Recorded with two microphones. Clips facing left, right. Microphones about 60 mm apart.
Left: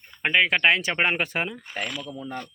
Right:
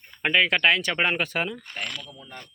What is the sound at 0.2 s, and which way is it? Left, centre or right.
Speech, centre.